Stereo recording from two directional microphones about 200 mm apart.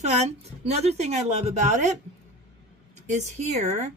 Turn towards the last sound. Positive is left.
turn(degrees=-35)  # may be behind; listen again after turning